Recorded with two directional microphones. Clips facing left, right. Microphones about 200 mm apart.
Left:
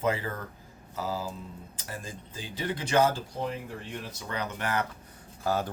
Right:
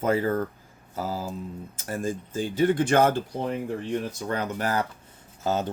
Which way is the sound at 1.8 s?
45° right (ahead or behind).